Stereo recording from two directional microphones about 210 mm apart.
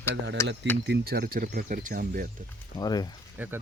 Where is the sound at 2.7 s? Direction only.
20° left (ahead or behind).